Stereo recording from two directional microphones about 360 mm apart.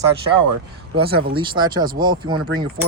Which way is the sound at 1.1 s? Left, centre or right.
Right.